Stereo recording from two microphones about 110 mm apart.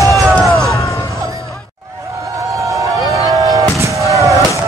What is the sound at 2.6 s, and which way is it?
Fireworks, 30° right (ahead or behind).